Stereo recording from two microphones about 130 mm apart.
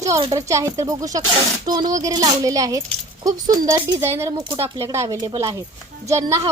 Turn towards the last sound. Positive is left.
turn(degrees=-25)  # may be behind; listen again after turning